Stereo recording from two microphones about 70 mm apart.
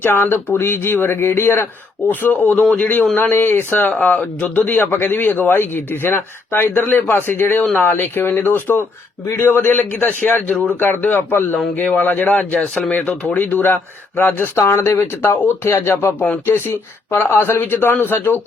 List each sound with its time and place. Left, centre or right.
0.0 s a man's voice: left
3.9 s a man's voice: centre